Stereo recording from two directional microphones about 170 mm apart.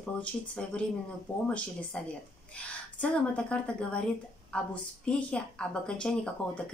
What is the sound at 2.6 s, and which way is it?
A woman's voice, 5° left (ahead or behind).